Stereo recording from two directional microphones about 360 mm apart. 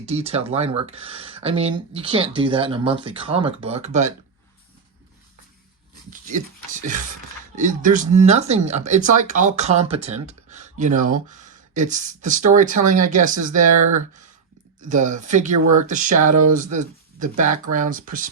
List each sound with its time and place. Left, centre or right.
0.0 s speech: centre
6.7 s speech: right
14.8 s speech: right